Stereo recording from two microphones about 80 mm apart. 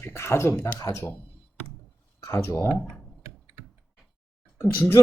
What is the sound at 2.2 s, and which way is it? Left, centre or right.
Speech, left.